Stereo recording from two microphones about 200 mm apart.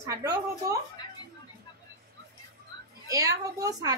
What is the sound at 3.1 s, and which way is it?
Speech, 15° right (ahead or behind).